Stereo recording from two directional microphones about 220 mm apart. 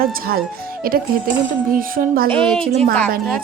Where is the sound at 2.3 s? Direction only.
5° left (ahead or behind).